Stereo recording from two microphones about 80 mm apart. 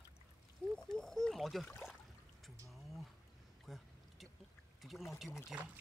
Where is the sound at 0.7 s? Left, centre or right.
Centre.